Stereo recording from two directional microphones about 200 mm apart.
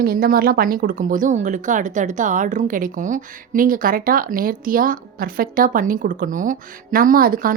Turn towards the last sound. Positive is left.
turn(degrees=-45)  # may be behind; listen again after turning